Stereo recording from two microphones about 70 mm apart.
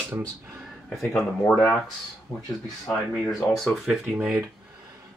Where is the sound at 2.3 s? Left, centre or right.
Left.